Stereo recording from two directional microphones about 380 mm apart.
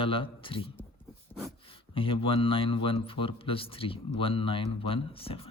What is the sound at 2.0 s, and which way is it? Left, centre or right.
Speech, centre.